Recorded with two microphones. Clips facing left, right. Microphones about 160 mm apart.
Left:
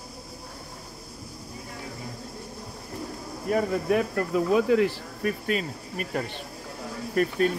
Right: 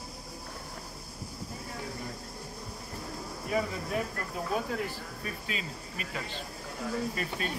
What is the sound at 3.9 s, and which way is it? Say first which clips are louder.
Speech: left 10 dB; 90° left.